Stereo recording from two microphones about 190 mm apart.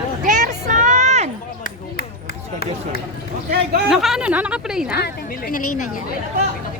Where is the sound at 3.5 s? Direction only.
55° right (ahead or behind).